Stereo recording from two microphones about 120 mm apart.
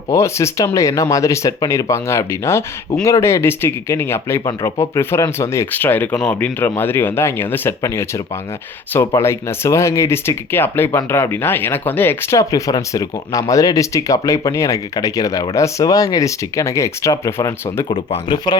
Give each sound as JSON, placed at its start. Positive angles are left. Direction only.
{"t": 0.1, "sound": "speech", "side_deg": 25}
{"t": 17.8, "sound": "speech", "side_deg": 45}